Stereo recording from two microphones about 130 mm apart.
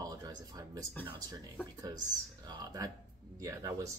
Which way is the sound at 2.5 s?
30° right (ahead or behind).